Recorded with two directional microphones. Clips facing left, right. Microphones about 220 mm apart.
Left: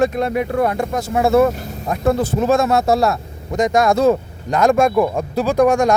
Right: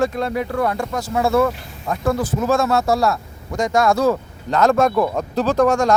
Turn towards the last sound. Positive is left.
turn(degrees=15)  # may be behind; listen again after turning